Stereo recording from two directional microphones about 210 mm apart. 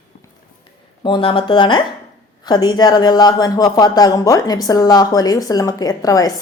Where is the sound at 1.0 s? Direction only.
25° left (ahead or behind).